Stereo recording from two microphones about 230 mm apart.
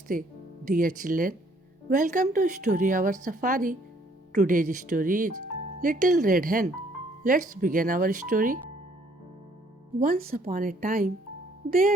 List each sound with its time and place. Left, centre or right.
0.1 s speech: right
10.0 s speech: right